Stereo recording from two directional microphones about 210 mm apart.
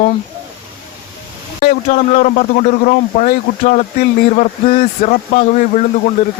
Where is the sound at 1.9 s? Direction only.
35° left (ahead or behind).